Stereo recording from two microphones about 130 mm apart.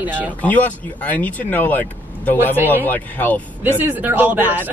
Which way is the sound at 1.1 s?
10° left (ahead or behind).